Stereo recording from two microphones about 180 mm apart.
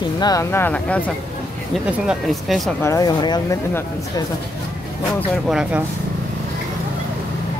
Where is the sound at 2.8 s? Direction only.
20° left (ahead or behind).